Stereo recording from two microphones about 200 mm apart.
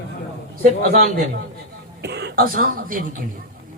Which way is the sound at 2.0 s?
55° right (ahead or behind).